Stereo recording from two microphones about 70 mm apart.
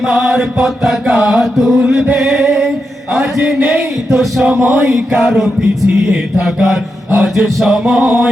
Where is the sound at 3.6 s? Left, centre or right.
Right.